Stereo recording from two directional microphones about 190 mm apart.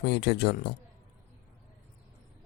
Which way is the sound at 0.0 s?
60° left (ahead or behind).